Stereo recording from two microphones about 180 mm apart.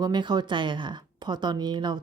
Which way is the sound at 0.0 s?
25° right (ahead or behind).